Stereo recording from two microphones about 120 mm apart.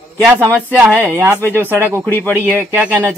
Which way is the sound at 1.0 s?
10° right (ahead or behind).